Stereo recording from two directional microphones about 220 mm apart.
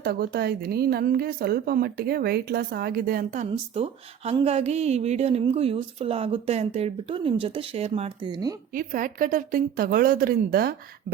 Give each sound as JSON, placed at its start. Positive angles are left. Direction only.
{"t": 0.0, "sound": "a woman's voice", "side_deg": -45}
{"t": 8.7, "sound": "a woman's voice", "side_deg": -40}